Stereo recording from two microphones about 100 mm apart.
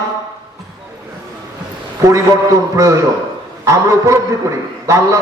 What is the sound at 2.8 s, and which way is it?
A man's voice, 30° right (ahead or behind).